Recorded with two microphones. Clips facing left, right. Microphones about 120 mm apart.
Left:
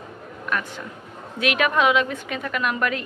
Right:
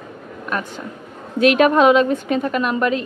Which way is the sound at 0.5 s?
30° right (ahead or behind).